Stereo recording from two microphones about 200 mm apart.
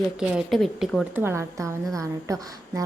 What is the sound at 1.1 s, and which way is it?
A woman's voice, 10° right (ahead or behind).